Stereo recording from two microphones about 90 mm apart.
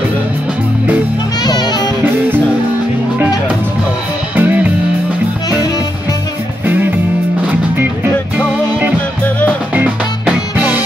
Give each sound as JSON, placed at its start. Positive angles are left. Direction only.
{"t": 1.4, "sound": "music", "side_deg": 50}
{"t": 4.4, "sound": "music", "side_deg": -20}
{"t": 9.2, "sound": "music", "side_deg": 15}
{"t": 9.8, "sound": "music", "side_deg": -15}